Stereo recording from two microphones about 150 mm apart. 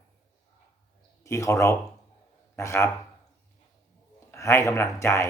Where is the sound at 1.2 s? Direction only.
20° left (ahead or behind).